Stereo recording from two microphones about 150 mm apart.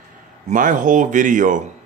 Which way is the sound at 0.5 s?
60° right (ahead or behind).